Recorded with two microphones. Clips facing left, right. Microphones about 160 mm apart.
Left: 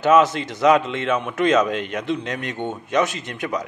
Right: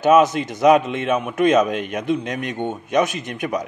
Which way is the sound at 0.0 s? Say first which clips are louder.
Right 2 dB; 15° right (ahead or behind).